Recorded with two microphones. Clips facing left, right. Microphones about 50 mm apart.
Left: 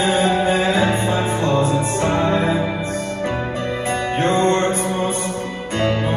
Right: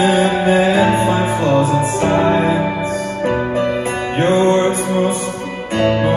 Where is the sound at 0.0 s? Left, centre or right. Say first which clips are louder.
Right 3 dB; right.